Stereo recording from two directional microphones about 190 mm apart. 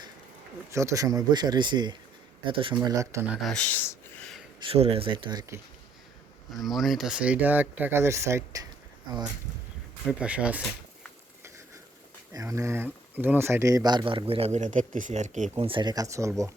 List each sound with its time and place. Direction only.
0.7 s speech: 15° right (ahead or behind)
2.8 s speech: 15° right (ahead or behind)
3.4 s a sound: 5° left (ahead or behind)
4.6 s speech: 30° right (ahead or behind)
6.5 s speech: centre (ahead or behind); by 9.2 s 25° right (ahead or behind)
10.1 s speech: 5° right (ahead or behind)
11.4 s a sound: 15° right (ahead or behind)
12.3 s speech: 15° right (ahead or behind)